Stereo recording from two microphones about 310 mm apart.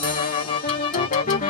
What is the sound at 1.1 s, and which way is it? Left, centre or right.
Music, left.